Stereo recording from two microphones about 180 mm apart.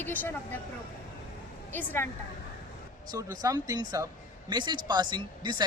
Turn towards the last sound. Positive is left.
turn(degrees=-25)  # may be behind; listen again after turning